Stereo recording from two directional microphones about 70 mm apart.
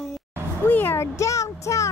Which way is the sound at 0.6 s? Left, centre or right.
Left.